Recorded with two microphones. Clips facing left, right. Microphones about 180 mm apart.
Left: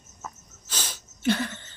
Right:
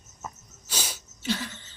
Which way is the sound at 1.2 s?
55° left (ahead or behind).